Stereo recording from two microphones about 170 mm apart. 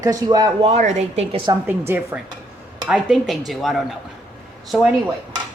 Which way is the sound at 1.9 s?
15° right (ahead or behind).